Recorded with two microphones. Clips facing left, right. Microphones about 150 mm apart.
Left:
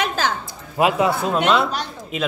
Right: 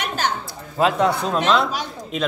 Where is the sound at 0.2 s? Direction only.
90° left.